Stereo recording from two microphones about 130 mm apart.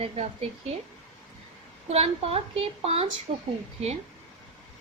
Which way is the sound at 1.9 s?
50° right (ahead or behind).